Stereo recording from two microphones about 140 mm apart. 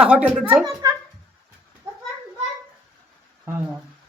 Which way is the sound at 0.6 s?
25° right (ahead or behind).